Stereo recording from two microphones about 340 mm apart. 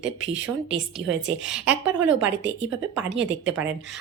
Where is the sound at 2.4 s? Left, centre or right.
Right.